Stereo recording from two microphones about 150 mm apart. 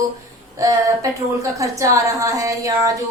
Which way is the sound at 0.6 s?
20° right (ahead or behind).